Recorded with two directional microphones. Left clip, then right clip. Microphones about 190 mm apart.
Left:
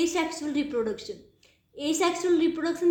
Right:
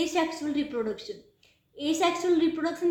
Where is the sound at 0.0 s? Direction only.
30° left (ahead or behind).